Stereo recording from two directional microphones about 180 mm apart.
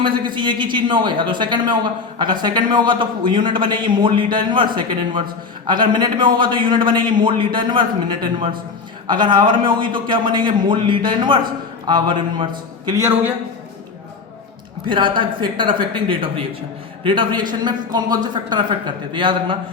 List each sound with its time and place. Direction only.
0.3 s speech: 25° right (ahead or behind)
12.9 s a man's voice: 15° right (ahead or behind)
14.8 s speech: 25° right (ahead or behind)